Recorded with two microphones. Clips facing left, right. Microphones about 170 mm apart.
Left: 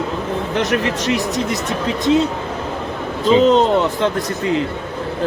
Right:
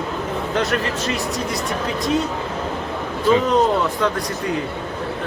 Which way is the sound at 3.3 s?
25° left (ahead or behind).